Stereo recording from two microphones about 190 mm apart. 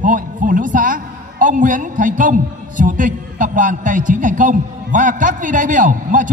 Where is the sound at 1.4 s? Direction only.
45° right (ahead or behind).